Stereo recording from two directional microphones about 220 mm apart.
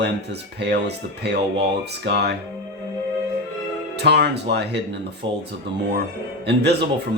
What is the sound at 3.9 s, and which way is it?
Speech, 50° right (ahead or behind).